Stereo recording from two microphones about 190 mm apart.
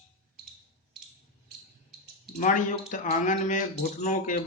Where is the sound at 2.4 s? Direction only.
45° left (ahead or behind).